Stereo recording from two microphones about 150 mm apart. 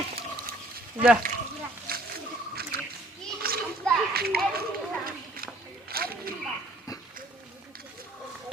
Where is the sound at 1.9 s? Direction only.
80° right.